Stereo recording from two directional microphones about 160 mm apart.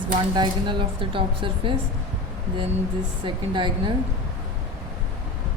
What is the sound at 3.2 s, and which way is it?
Speech, 30° right (ahead or behind).